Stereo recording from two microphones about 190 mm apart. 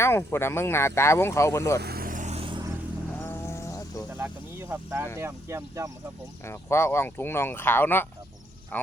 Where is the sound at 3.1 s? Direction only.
10° left (ahead or behind).